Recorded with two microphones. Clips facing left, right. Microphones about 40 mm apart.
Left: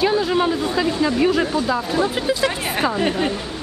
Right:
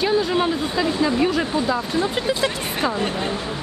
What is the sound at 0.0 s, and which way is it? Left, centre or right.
Speech, centre.